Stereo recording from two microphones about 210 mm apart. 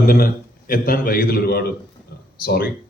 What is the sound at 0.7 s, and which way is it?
A man's voice, 40° left (ahead or behind).